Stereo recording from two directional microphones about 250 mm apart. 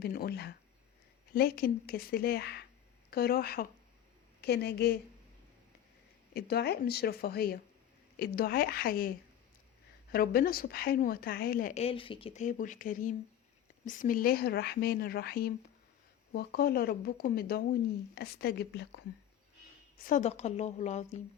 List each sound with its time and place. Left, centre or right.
0.0 s a woman's voice: left
6.3 s a woman's voice: left
20.0 s a woman's voice: left